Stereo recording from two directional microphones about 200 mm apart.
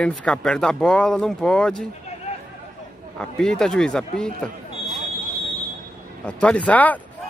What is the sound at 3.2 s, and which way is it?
Speech, 5° left (ahead or behind).